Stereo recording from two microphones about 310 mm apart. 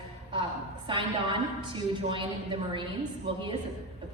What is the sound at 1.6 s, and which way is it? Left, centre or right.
A woman's voice, centre.